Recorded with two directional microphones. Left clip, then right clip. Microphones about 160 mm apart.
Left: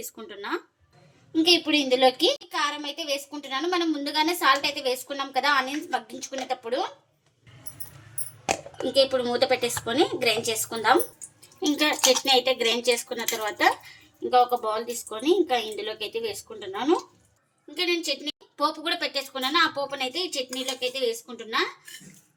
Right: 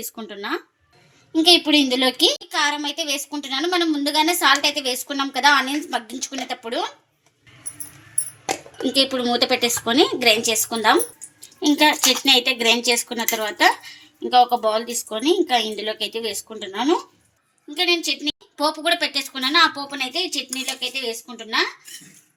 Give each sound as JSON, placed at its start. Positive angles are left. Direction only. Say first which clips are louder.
{"t": 0.0, "sound": "a woman's voice", "louder": "right 5 dB", "side_deg": -55}
{"t": 8.9, "sound": "speech", "louder": "right 2 dB", "side_deg": -55}
{"t": 12.2, "sound": "a woman's voice", "louder": "right 5 dB", "side_deg": -50}